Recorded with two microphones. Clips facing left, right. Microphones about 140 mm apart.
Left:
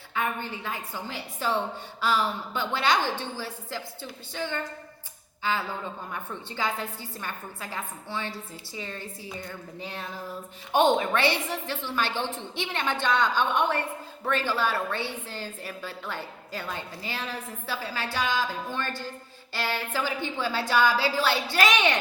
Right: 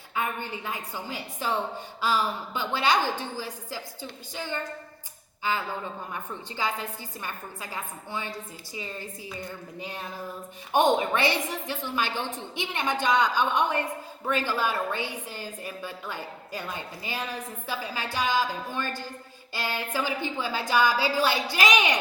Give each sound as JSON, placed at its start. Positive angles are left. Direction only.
{"t": 0.1, "sound": "a woman's voice", "side_deg": -10}
{"t": 5.4, "sound": "speech", "side_deg": -15}
{"t": 7.2, "sound": "a woman's voice", "side_deg": -10}
{"t": 10.8, "sound": "a woman's voice", "side_deg": -15}